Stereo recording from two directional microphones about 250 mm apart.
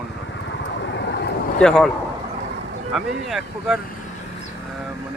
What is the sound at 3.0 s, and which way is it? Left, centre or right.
Speech, centre.